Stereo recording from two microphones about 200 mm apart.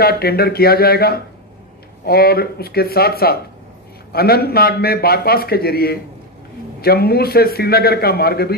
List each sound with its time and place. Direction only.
0.0 s a man's voice: 50° left (ahead or behind)